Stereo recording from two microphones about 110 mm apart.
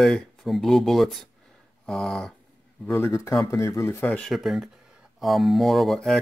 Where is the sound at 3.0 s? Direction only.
25° left (ahead or behind).